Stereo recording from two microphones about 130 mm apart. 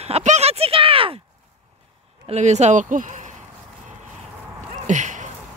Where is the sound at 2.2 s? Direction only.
60° right (ahead or behind).